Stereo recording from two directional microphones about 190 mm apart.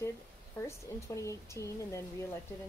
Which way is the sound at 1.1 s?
15° left (ahead or behind).